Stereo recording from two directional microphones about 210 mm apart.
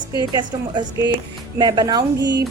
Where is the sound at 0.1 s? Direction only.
20° left (ahead or behind).